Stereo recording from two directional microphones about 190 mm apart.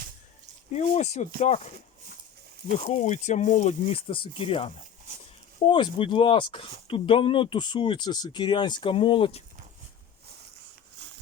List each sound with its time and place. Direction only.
0.7 s speech: 35° left (ahead or behind)
2.7 s speech: 35° left (ahead or behind)